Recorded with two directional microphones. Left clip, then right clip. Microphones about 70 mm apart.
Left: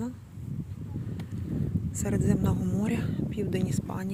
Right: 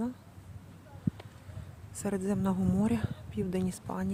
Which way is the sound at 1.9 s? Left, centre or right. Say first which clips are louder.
Left 3 dB; right.